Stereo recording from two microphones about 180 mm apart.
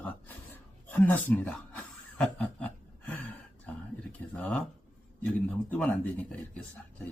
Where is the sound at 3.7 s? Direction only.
5° left (ahead or behind).